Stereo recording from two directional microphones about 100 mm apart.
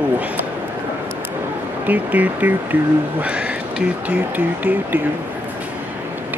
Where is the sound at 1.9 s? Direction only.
15° right (ahead or behind).